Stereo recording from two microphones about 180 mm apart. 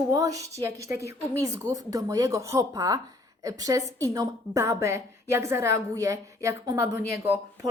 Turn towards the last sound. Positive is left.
turn(degrees=-15)  # may be behind; listen again after turning